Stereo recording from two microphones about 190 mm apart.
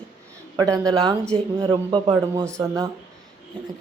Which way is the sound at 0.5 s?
20° right (ahead or behind).